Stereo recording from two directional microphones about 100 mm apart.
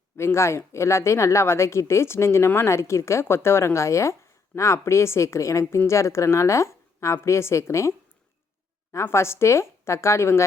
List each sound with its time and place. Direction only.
0.2 s speech: 25° left (ahead or behind)